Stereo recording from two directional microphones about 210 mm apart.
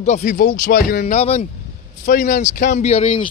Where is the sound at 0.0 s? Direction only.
35° left (ahead or behind).